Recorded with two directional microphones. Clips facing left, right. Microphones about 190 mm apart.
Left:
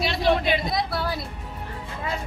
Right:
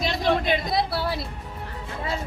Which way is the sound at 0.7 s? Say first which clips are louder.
Right 2 dB; 30° right (ahead or behind).